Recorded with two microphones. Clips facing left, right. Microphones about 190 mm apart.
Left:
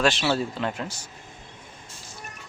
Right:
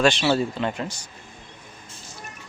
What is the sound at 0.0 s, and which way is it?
Speech, centre (ahead or behind).